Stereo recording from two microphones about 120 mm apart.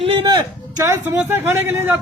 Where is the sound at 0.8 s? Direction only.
20° right (ahead or behind).